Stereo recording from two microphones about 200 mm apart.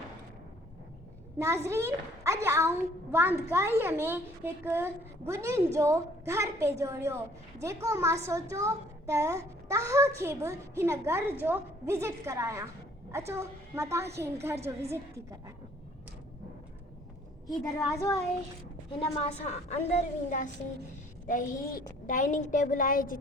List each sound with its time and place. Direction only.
1.4 s a child's voice: 15° right (ahead or behind)
18.9 s a woman's voice: 30° left (ahead or behind)